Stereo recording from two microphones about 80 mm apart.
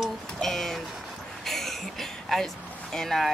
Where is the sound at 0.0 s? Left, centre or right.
Centre.